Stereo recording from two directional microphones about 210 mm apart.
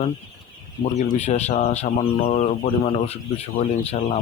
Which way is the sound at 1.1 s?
30° left (ahead or behind).